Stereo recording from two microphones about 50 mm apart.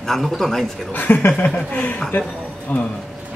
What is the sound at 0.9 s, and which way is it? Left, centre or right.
Chuckle, left.